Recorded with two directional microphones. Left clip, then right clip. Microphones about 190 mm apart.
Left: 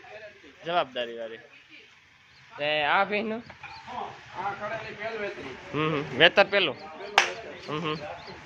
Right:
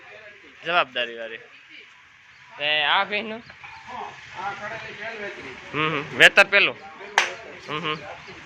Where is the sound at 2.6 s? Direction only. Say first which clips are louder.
Right 3 dB; 40° left (ahead or behind).